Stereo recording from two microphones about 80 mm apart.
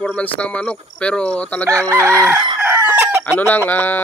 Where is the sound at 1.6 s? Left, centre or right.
Right.